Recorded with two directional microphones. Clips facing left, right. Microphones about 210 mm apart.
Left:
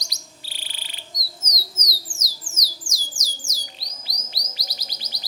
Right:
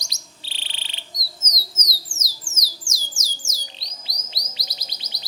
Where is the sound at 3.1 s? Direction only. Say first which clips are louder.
Even; 45° right (ahead or behind).